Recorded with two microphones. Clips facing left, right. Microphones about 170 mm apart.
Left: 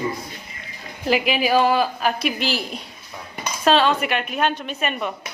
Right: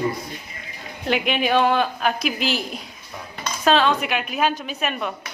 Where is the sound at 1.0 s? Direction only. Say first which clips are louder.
Left 2 dB; centre (ahead or behind).